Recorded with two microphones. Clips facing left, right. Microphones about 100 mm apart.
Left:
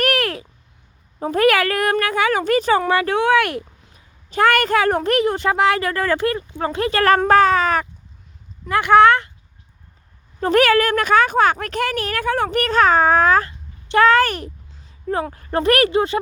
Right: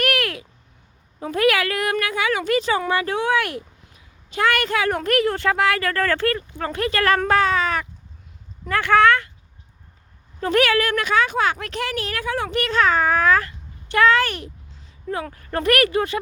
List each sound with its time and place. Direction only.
0.0 s a sound: 35° left (ahead or behind)
1.2 s speech: 40° left (ahead or behind)
2.9 s speech: 70° left (ahead or behind)
4.3 s speech: 45° left (ahead or behind)
4.9 s speech: 25° left (ahead or behind)
7.3 s a sound: 45° left (ahead or behind)
8.7 s speech: 20° left (ahead or behind)
10.4 s speech: 45° left (ahead or behind)
14.0 s speech: 45° left (ahead or behind)
15.1 s speech: 30° left (ahead or behind)